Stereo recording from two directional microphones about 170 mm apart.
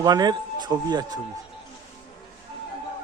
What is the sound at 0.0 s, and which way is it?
Speech, 25° right (ahead or behind).